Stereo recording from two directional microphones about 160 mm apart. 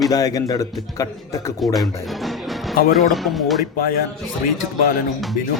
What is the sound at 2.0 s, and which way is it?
Music, centre (ahead or behind).